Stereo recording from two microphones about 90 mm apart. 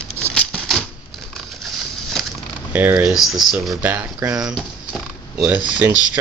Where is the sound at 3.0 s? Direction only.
Centre (ahead or behind).